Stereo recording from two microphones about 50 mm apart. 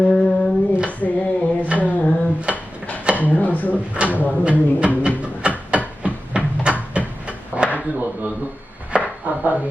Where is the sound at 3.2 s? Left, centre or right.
Left.